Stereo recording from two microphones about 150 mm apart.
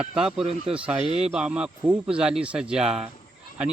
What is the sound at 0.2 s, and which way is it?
Speech, 5° right (ahead or behind).